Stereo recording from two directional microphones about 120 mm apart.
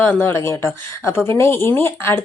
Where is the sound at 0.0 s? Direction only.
15° left (ahead or behind).